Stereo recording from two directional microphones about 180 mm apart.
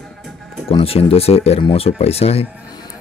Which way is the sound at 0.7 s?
30° left (ahead or behind).